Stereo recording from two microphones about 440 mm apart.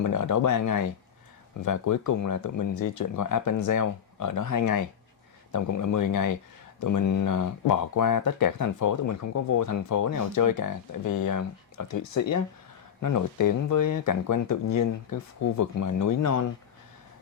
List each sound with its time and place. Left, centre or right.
0.0 s speech: left